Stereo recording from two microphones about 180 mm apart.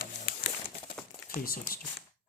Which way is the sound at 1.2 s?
55° left (ahead or behind).